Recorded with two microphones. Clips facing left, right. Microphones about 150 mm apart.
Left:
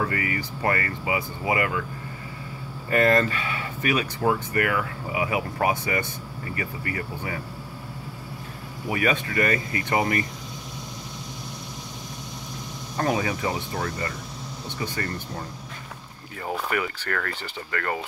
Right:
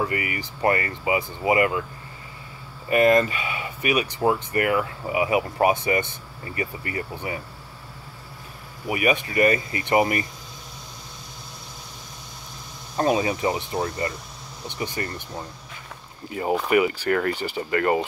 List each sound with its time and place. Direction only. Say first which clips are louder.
0.0 s speech: even; 20° right (ahead or behind)
2.9 s speech: right 3 dB; 15° right (ahead or behind)
8.8 s speech: right 2 dB; 15° right (ahead or behind)
12.9 s speech: right 3 dB; 20° right (ahead or behind)
16.5 s speech: right 8 dB; 15° right (ahead or behind)